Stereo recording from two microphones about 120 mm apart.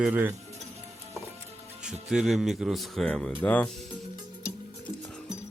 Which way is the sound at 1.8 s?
5° right (ahead or behind).